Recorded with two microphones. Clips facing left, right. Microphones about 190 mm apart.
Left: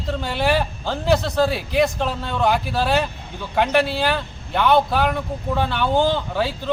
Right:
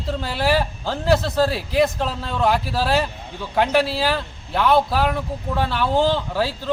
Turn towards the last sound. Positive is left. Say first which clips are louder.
# even
turn(degrees=0)  # may be behind; listen again after turning